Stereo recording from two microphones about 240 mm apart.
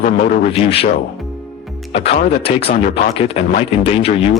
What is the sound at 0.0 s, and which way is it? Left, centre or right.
Speech, left.